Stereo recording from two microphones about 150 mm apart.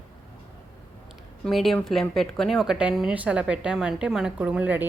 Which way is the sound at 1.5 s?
Centre (ahead or behind).